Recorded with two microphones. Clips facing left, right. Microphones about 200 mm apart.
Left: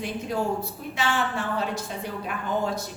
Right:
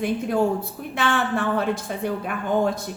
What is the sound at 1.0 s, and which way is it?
A woman's voice, 55° right (ahead or behind).